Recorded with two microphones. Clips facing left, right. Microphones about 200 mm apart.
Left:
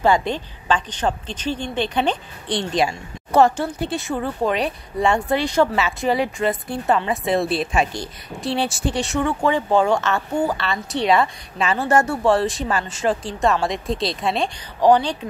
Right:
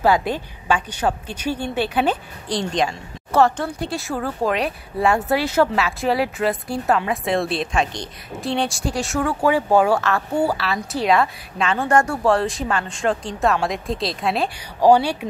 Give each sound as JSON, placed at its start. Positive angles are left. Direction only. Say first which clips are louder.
{"t": 0.0, "sound": "a woman's voice", "louder": "even", "side_deg": -5}
{"t": 3.3, "sound": "a woman's voice", "louder": "left 1 dB", "side_deg": 15}
{"t": 3.6, "sound": "speech", "louder": "left 1 dB", "side_deg": 0}